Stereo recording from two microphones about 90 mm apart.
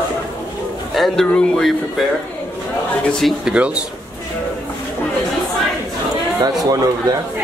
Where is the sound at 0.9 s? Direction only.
5° left (ahead or behind).